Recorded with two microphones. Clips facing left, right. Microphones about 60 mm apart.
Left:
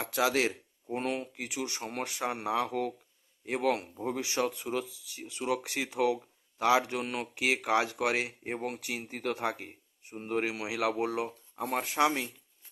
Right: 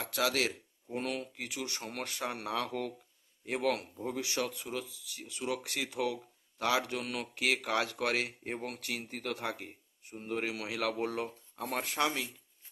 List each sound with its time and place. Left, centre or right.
0.0 s speech: left; by 3.8 s centre
3.8 s speech: left
9.2 s speech: left